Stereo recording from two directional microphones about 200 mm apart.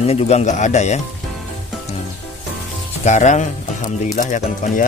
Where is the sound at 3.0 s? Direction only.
35° left (ahead or behind).